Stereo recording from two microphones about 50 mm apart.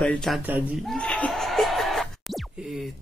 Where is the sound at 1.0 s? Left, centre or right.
Left.